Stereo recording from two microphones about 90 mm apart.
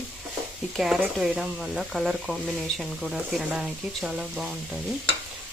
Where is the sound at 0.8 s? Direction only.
10° right (ahead or behind).